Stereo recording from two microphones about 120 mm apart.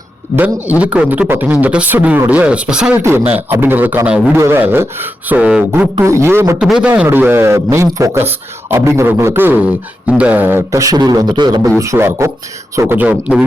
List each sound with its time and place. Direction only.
0.3 s speech: 15° right (ahead or behind)
6.0 s a man's voice: 25° right (ahead or behind)
6.6 s a man's voice: 5° right (ahead or behind); by 11.7 s 35° right (ahead or behind)
11.8 s a man's voice: 20° right (ahead or behind)
13.0 s speech: 10° right (ahead or behind)